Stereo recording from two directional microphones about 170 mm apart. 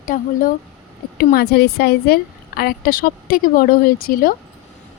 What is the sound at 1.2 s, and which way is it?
Speech, 65° left (ahead or behind).